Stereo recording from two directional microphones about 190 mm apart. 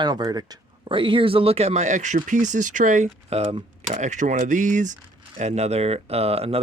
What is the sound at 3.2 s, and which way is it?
Speech, 30° right (ahead or behind).